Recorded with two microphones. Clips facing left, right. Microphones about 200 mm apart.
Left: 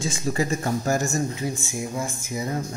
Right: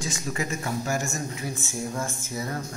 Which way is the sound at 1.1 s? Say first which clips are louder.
Left 6 dB; 25° left (ahead or behind).